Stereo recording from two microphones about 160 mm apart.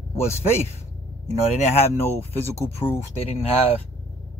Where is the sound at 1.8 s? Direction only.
15° left (ahead or behind).